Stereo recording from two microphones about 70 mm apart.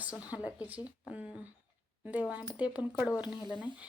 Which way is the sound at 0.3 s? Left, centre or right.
Centre.